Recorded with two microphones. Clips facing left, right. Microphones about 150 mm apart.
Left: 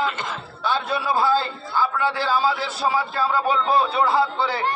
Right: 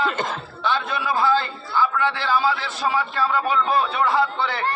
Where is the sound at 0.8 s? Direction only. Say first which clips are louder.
Left 1 dB; 35° left (ahead or behind).